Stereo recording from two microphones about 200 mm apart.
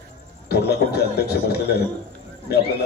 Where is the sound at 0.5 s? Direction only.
55° left (ahead or behind).